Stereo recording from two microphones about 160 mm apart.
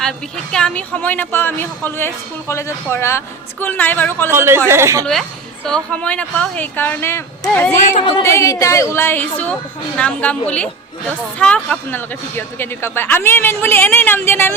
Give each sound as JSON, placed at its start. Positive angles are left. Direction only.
{"t": 0.5, "sound": "a woman's voice", "side_deg": 5}
{"t": 4.3, "sound": "speech", "side_deg": -15}
{"t": 5.6, "sound": "a woman's voice", "side_deg": 5}